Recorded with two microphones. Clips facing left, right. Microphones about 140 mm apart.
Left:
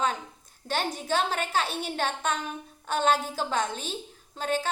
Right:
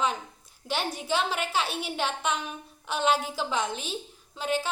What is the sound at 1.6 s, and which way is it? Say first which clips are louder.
Speech: left 1 dB; 10° right (ahead or behind).